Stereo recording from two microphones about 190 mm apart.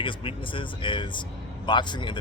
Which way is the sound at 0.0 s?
25° left (ahead or behind).